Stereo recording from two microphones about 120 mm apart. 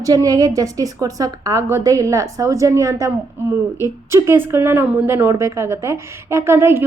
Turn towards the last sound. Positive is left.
turn(degrees=-20)  # may be behind; listen again after turning